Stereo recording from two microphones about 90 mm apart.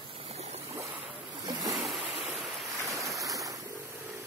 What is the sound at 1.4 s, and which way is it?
Boat, 45° right (ahead or behind).